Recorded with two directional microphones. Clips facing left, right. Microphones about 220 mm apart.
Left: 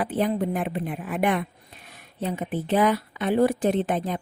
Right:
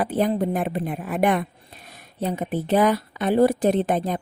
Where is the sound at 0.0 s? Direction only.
40° right (ahead or behind).